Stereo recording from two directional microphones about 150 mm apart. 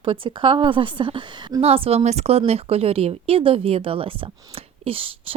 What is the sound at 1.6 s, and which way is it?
A woman's voice, 40° right (ahead or behind).